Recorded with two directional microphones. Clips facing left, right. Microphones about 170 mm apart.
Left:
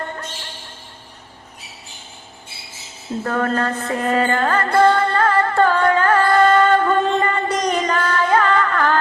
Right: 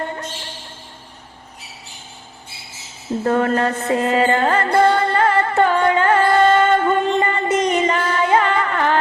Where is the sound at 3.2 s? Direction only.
20° right (ahead or behind).